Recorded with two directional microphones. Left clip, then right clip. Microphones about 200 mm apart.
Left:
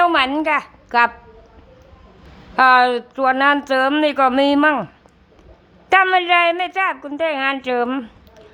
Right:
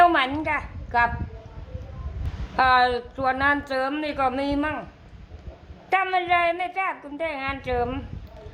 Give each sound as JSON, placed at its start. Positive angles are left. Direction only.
{"t": 0.0, "sound": "a sound", "side_deg": 15}
{"t": 2.6, "sound": "speech", "side_deg": 25}
{"t": 5.9, "sound": "speech", "side_deg": 25}